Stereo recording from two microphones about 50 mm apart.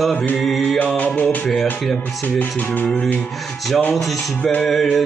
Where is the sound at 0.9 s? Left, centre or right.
Left.